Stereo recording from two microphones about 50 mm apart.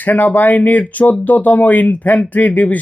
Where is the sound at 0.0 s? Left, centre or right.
Left.